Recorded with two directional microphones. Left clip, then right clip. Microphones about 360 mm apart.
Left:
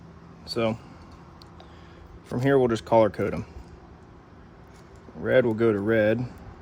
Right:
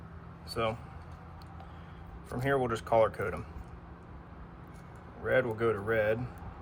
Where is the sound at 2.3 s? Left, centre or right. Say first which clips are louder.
Left 8 dB; left.